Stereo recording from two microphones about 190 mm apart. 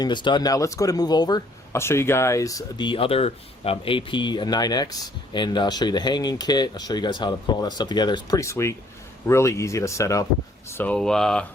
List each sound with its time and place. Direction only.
0.0 s speech: 25° left (ahead or behind); by 11.4 s 5° left (ahead or behind)